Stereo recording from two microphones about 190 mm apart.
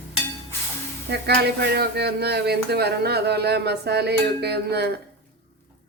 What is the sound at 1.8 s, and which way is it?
Speech, 60° right (ahead or behind).